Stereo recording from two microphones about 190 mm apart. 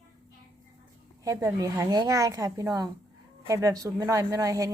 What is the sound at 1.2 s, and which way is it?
A woman's voice, 15° right (ahead or behind).